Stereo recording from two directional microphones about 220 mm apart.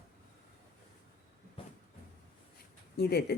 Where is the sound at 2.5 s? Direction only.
45° left (ahead or behind).